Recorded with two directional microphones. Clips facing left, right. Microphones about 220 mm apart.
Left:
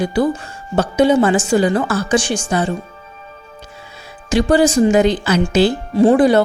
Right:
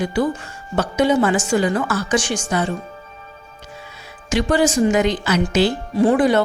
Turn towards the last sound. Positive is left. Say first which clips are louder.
# left 4 dB
turn(degrees=35)  # may be behind; listen again after turning